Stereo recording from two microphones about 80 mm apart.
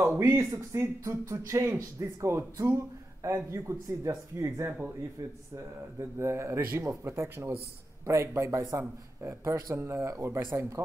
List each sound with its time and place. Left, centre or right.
0.0 s speech: right
5.9 s speech: right